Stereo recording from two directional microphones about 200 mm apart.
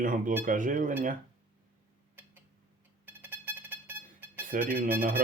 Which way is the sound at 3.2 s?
10° right (ahead or behind).